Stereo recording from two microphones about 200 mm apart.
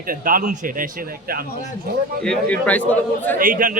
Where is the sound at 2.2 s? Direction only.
5° left (ahead or behind).